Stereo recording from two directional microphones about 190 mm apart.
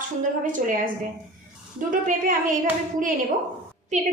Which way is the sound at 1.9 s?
45° right (ahead or behind).